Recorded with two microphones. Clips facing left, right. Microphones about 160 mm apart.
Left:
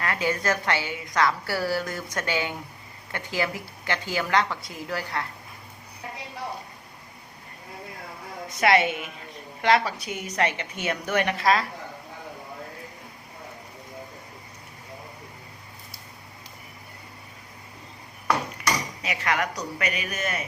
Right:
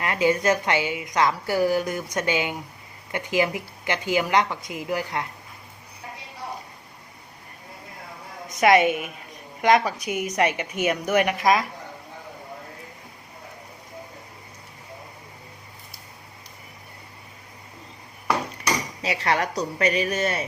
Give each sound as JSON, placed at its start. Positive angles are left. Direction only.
{"t": 0.0, "sound": "a woman's voice", "side_deg": -20}
{"t": 8.4, "sound": "a woman's voice", "side_deg": -15}
{"t": 19.0, "sound": "speech", "side_deg": -35}